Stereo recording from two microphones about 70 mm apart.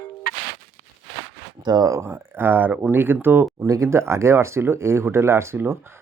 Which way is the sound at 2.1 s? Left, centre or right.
Right.